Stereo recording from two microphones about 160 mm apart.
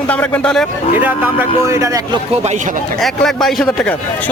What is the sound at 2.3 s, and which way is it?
Speech, 45° right (ahead or behind).